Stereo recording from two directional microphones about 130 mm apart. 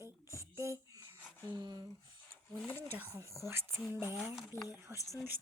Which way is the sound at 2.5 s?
10° left (ahead or behind).